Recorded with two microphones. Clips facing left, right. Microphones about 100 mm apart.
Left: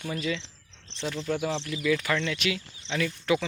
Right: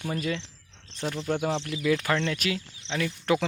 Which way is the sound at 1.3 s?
35° right (ahead or behind).